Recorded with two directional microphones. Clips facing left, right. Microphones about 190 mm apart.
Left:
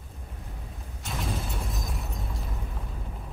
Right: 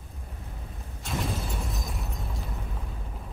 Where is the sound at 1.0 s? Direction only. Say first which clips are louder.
Right 2 dB; centre (ahead or behind).